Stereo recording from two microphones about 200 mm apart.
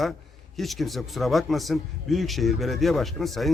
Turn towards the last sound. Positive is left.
turn(degrees=0)  # may be behind; listen again after turning